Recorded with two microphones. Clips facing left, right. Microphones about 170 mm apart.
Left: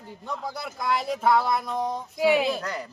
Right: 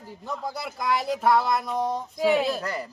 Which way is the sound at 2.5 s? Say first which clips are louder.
Right 1 dB; 5° right (ahead or behind).